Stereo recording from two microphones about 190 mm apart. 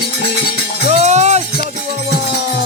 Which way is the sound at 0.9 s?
35° right (ahead or behind).